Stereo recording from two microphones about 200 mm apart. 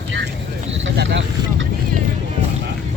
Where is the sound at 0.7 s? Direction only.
65° right (ahead or behind).